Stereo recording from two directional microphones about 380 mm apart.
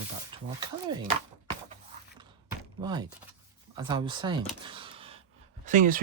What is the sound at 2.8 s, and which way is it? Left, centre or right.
Speech, centre.